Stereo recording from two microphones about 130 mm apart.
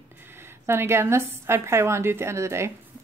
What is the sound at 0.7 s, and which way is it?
A woman's voice, 20° right (ahead or behind).